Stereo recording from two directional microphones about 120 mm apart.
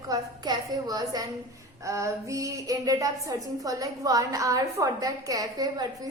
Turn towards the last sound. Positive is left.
turn(degrees=-30)  # may be behind; listen again after turning